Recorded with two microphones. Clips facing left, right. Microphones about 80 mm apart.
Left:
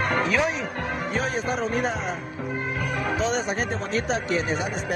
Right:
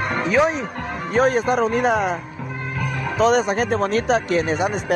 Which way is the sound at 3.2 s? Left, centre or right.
Right.